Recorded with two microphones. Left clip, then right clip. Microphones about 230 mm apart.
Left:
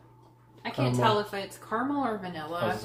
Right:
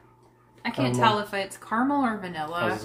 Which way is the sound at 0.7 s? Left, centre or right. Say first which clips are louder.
Right 3 dB; right.